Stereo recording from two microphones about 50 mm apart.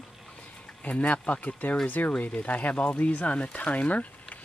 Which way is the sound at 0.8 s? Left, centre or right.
Left.